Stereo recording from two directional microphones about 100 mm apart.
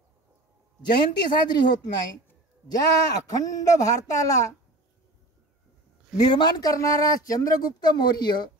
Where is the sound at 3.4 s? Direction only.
35° left (ahead or behind).